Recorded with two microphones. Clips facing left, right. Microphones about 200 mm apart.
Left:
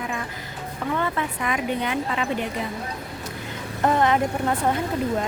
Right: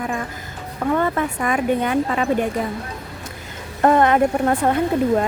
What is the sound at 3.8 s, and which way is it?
Speech, 55° right (ahead or behind).